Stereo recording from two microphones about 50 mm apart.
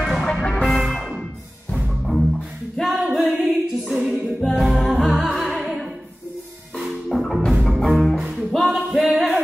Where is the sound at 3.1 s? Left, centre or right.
Centre.